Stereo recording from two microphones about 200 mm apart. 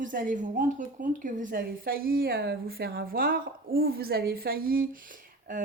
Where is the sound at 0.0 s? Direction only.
40° right (ahead or behind).